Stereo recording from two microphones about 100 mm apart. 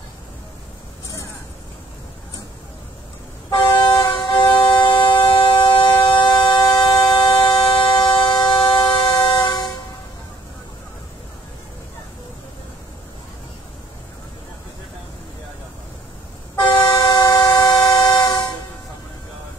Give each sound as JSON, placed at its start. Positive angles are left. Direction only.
{"t": 3.4, "sound": "vehicle", "side_deg": 50}
{"t": 17.0, "sound": "vehicle", "side_deg": 50}